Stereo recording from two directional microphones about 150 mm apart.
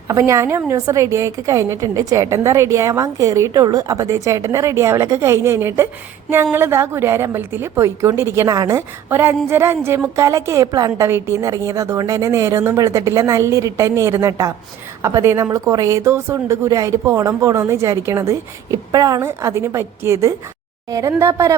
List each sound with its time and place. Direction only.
0.1 s a woman's voice: 20° right (ahead or behind)